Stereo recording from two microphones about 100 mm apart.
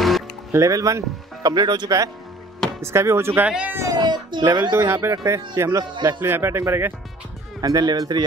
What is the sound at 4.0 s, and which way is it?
Speech, 45° right (ahead or behind).